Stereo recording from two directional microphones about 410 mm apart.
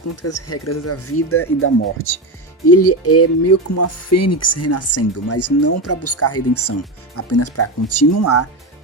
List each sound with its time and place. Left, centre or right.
0.2 s speech: left